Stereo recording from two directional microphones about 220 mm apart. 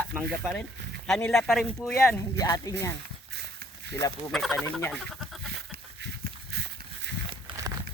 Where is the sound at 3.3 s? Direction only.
50° right (ahead or behind).